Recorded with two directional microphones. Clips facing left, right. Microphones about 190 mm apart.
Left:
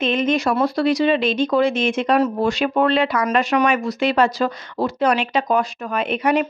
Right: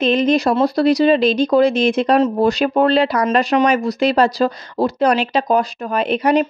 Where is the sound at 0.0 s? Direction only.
35° right (ahead or behind).